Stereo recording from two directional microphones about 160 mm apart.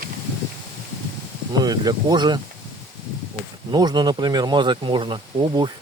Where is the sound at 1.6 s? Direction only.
25° right (ahead or behind).